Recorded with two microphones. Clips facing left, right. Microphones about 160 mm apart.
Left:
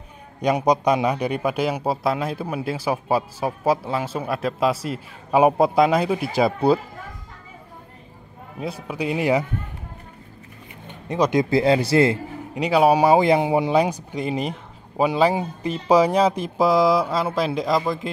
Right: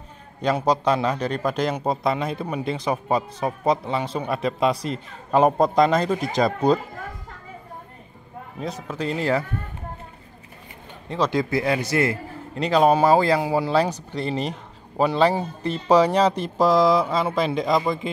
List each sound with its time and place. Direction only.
0.4 s a man's voice: 15° left (ahead or behind)
8.5 s a man's voice: 10° left (ahead or behind)
11.1 s a man's voice: 20° left (ahead or behind)
12.5 s a man's voice: 10° left (ahead or behind)